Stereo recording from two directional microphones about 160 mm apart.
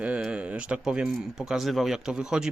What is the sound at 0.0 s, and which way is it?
Speech, 5° right (ahead or behind).